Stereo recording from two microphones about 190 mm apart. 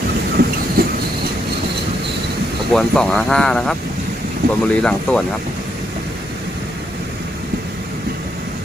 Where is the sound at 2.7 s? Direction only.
5° left (ahead or behind).